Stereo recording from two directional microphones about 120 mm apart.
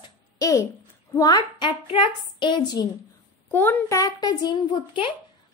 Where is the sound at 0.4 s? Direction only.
30° left (ahead or behind).